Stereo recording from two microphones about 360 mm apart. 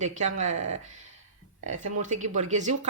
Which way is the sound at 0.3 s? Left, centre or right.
Right.